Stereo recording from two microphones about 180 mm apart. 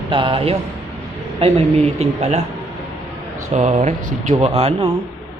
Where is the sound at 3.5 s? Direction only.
40° right (ahead or behind).